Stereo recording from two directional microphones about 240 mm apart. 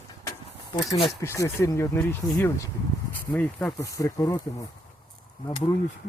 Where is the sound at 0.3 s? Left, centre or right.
Centre.